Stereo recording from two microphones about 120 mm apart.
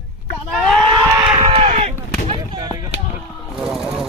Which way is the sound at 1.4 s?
55° right (ahead or behind).